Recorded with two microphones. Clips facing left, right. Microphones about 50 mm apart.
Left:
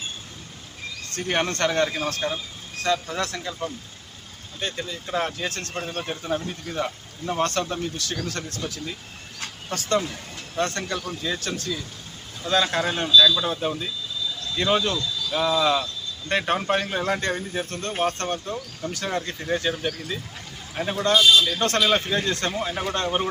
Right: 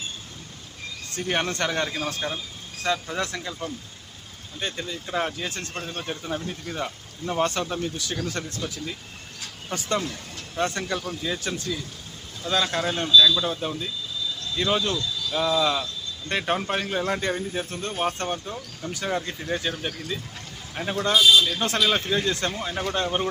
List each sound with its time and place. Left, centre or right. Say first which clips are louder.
1.2 s speech: left 2 dB; centre
7.9 s speech: even; centre
8.5 s speech: even; centre
10.0 s speech: even; centre
10.6 s speech: even; centre
11.3 s speech: even; centre
12.4 s speech: left 2 dB; centre